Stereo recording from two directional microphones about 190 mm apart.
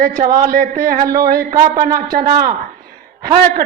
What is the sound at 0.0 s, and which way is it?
Speech, 50° right (ahead or behind).